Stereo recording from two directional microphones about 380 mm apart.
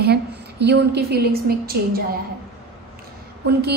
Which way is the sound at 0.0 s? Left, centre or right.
Right.